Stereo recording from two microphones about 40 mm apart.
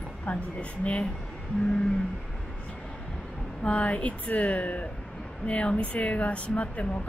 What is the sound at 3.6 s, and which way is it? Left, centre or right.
Speech, left.